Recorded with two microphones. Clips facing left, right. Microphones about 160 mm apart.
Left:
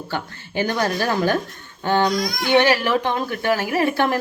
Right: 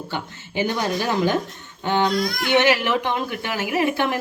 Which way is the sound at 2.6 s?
20° right (ahead or behind).